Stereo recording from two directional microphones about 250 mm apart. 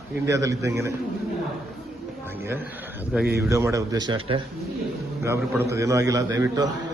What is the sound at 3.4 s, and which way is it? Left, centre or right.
Speech, centre.